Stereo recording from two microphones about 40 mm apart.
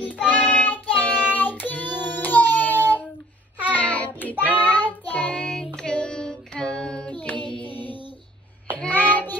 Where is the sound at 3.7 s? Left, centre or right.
Left.